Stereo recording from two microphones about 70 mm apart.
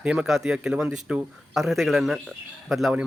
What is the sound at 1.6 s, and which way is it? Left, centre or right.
Speech, centre.